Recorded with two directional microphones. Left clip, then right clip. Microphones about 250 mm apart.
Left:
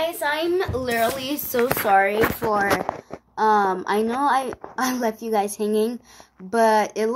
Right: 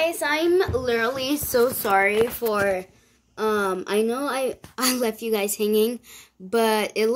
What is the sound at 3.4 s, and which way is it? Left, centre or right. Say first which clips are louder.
Speech: left 5 dB; centre.